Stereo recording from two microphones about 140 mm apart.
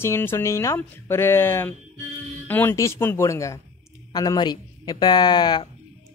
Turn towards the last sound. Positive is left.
turn(degrees=30)  # may be behind; listen again after turning